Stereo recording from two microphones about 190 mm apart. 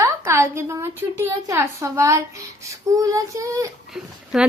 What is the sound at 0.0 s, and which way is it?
A woman's voice, 15° right (ahead or behind).